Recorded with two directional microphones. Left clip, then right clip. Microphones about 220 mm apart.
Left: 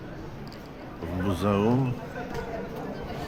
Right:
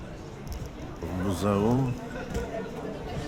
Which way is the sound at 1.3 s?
5° right (ahead or behind).